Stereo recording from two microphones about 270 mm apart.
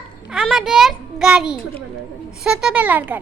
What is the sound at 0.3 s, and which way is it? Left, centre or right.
A child's voice, centre.